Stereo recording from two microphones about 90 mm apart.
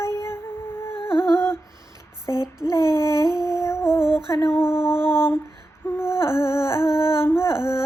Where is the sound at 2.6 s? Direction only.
50° right (ahead or behind).